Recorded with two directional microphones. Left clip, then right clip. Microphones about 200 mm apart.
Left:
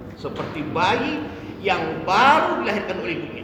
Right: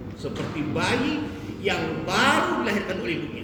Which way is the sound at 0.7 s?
20° right (ahead or behind).